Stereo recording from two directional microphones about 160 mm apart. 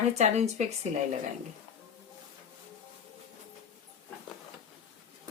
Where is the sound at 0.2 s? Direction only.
40° right (ahead or behind).